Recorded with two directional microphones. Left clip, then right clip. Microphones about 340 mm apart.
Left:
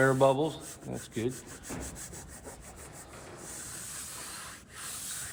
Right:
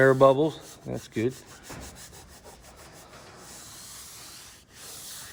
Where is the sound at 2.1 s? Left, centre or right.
Centre.